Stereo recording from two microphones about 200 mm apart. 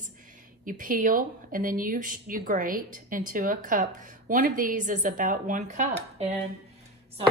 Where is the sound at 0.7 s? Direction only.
45° right (ahead or behind).